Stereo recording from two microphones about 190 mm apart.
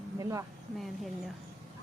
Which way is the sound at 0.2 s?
15° right (ahead or behind).